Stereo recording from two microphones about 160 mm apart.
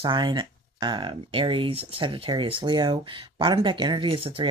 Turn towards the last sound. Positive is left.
turn(degrees=-35)  # may be behind; listen again after turning